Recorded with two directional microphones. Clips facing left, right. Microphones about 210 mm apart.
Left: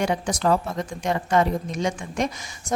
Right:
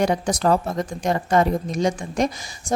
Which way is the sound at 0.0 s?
40° right (ahead or behind).